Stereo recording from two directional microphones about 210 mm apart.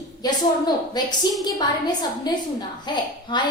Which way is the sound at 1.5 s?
20° left (ahead or behind).